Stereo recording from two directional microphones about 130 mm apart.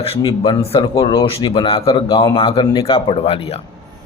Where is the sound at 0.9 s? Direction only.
30° left (ahead or behind).